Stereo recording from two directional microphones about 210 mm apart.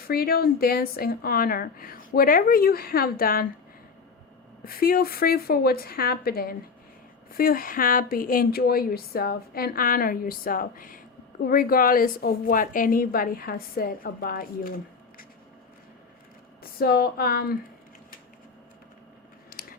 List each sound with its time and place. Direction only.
0.1 s a woman's voice: 45° left (ahead or behind)
4.6 s a woman's voice: 45° left (ahead or behind)
16.7 s a woman's voice: 45° left (ahead or behind)